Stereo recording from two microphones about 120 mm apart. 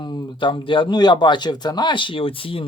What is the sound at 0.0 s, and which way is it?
Speech, 40° left (ahead or behind).